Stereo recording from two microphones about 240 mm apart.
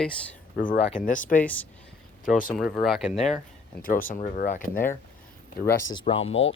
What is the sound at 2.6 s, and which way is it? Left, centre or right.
Speech, centre.